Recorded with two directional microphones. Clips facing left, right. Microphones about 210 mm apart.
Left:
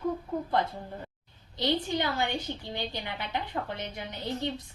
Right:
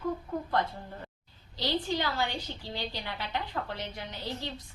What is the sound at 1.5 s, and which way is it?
A woman's voice, 20° left (ahead or behind).